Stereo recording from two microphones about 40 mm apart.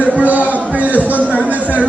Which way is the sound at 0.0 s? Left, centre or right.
Right.